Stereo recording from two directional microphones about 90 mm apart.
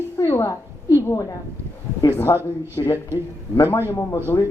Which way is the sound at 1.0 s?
35° left (ahead or behind).